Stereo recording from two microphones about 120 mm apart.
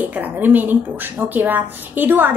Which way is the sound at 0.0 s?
15° right (ahead or behind).